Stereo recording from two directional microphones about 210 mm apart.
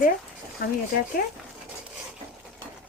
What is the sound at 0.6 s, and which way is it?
Speech, 45° left (ahead or behind).